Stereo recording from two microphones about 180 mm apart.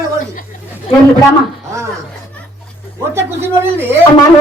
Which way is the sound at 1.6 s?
15° right (ahead or behind).